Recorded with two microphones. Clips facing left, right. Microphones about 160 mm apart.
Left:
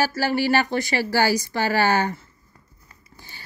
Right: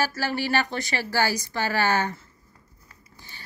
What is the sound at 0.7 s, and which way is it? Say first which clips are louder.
Speech: left 5 dB; 35° left (ahead or behind).